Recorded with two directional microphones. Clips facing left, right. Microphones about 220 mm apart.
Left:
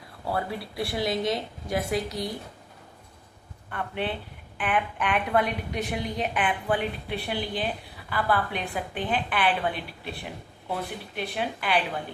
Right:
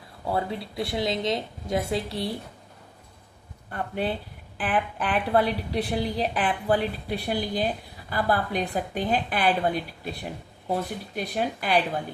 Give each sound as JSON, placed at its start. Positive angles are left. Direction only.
{"t": 0.3, "sound": "a woman's voice", "side_deg": -25}
{"t": 3.7, "sound": "a woman's voice", "side_deg": -35}